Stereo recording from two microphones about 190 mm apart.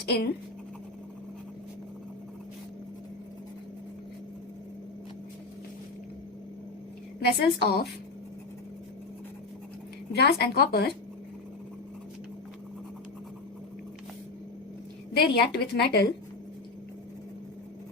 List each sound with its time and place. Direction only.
0.0 s a woman's voice: 60° left (ahead or behind)
7.2 s a woman's voice: 55° left (ahead or behind)
10.2 s a woman's voice: 60° left (ahead or behind)
15.1 s a woman's voice: 55° left (ahead or behind)